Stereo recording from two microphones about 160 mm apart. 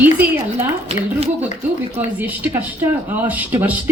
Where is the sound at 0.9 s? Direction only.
40° right (ahead or behind).